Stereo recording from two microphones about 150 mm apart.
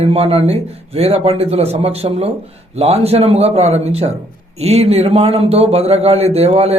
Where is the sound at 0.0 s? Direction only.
40° right (ahead or behind).